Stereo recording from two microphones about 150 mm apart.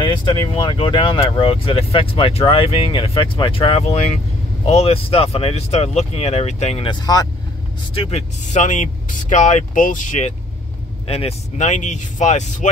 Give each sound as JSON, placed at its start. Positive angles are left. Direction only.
{"t": 0.0, "sound": "speech", "side_deg": 35}
{"t": 7.9, "sound": "speech", "side_deg": 40}
{"t": 11.1, "sound": "speech", "side_deg": 40}